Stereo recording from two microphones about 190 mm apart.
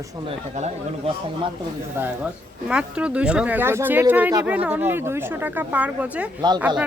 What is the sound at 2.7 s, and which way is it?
A woman's voice, 5° right (ahead or behind).